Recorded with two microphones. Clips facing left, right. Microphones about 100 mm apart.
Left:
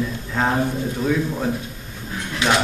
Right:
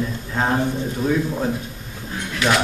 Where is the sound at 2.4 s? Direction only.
20° left (ahead or behind).